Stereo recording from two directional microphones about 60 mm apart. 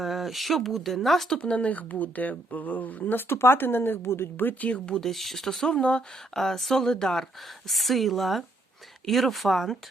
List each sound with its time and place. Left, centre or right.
0.0 s speech: centre
1.4 s speech: left
3.2 s a woman's voice: left
4.9 s speech: centre